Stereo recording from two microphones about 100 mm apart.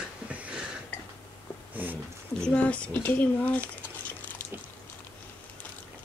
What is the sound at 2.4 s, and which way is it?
Speech, 10° left (ahead or behind).